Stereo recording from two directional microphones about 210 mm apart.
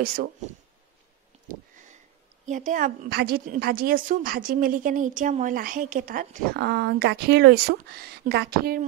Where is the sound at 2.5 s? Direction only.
35° right (ahead or behind).